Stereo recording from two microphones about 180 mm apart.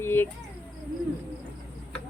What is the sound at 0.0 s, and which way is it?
Speech, 10° left (ahead or behind).